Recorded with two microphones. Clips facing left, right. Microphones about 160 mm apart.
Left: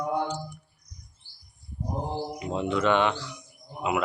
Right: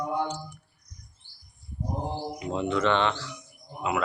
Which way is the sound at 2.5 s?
10° left (ahead or behind).